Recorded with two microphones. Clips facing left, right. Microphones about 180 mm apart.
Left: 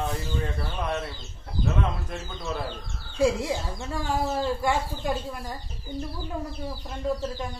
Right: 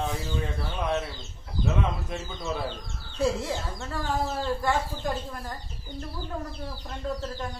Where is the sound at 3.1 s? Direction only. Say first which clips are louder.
Left 3 dB; 10° left (ahead or behind).